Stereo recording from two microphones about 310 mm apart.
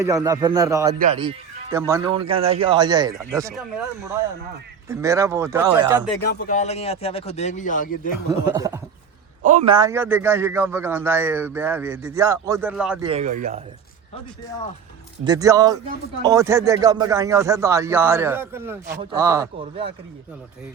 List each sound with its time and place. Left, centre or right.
0.0 s a man's voice: centre
0.9 s speech: right
1.7 s a man's voice: centre
6.2 s speech: left
8.3 s a man's voice: centre
9.4 s a man's voice: right; by 13.1 s centre
13.1 s speech: right
15.2 s a man's voice: centre